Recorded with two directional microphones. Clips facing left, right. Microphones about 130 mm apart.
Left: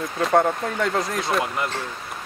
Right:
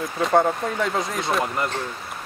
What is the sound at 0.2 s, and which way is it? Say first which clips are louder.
Speech: even; centre (ahead or behind).